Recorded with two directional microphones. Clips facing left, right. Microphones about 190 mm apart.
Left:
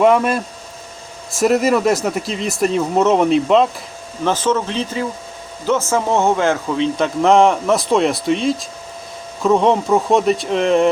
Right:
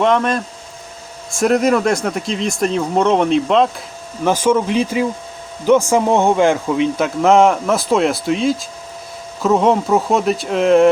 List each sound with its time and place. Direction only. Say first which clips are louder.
0.0 s speech: left 2 dB; 5° left (ahead or behind)
4.2 s speech: right 3 dB; 10° right (ahead or behind)
7.2 s speech: right 1 dB; centre (ahead or behind)